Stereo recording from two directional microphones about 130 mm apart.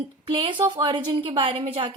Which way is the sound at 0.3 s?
40° right (ahead or behind).